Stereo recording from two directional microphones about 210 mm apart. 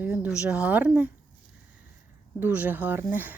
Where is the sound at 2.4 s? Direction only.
10° right (ahead or behind).